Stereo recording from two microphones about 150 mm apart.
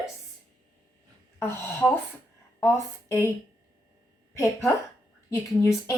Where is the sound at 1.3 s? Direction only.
15° left (ahead or behind).